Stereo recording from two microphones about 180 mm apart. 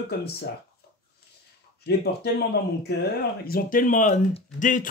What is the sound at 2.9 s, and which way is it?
Speech, 65° left (ahead or behind).